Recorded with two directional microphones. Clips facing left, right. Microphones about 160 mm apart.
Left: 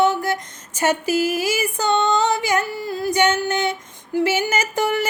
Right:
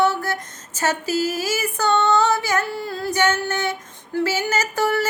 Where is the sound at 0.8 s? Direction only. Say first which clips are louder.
Left 3 dB; 15° left (ahead or behind).